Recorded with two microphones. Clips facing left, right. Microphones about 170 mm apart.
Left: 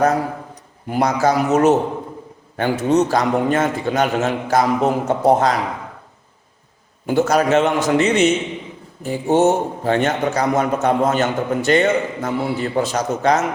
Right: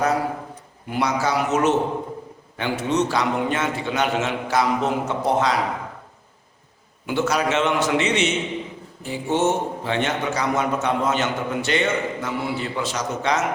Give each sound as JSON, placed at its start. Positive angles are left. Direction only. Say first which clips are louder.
{"t": 0.9, "sound": "a man's voice", "louder": "left 5 dB", "side_deg": 45}
{"t": 7.1, "sound": "a man's voice", "louder": "left 6 dB", "side_deg": 45}